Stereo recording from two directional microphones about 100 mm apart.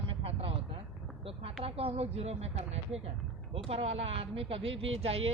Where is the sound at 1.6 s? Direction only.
75° right (ahead or behind).